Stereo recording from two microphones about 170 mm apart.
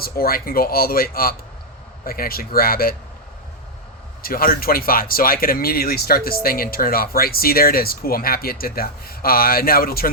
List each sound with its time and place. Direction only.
0.0 s speech: 60° left (ahead or behind)
4.2 s speech: 60° left (ahead or behind)